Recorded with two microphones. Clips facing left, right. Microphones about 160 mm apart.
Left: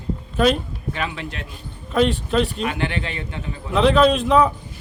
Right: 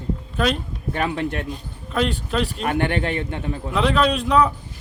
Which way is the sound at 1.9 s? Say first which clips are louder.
Left 4 dB; centre (ahead or behind).